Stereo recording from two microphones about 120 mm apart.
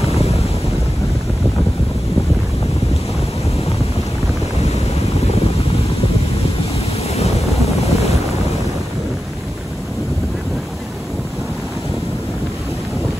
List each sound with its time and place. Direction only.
7.2 s wind noise: 60° left (ahead or behind)